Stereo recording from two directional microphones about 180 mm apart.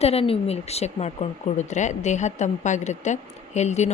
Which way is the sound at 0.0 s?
35° left (ahead or behind).